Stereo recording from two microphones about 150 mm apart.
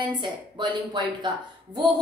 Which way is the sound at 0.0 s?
30° right (ahead or behind).